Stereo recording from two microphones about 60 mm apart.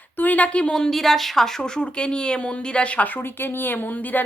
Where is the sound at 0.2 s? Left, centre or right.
Left.